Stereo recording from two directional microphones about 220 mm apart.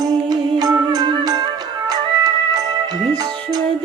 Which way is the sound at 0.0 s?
20° right (ahead or behind).